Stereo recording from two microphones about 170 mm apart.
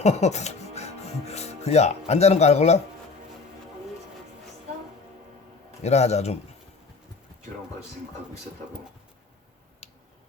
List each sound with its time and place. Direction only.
0.0 s speech: 40° left (ahead or behind)
5.8 s a man's voice: 40° left (ahead or behind)